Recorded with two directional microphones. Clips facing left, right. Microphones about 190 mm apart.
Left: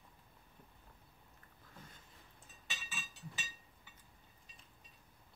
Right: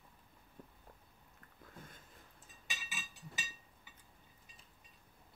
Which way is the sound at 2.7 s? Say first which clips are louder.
Right 1 dB; 10° right (ahead or behind).